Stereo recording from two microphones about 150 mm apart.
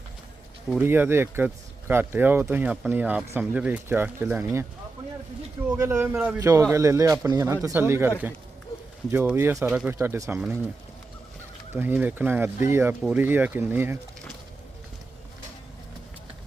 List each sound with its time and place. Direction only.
0.8 s speech: 15° right (ahead or behind)
5.7 s speech: 20° right (ahead or behind)
6.4 s speech: 20° right (ahead or behind)
9.6 s speech: 5° right (ahead or behind)
9.9 s speech: 15° right (ahead or behind)
11.7 s speech: 15° right (ahead or behind)